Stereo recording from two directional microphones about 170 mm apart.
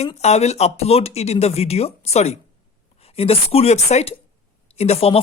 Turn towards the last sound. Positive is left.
turn(degrees=35)  # may be behind; listen again after turning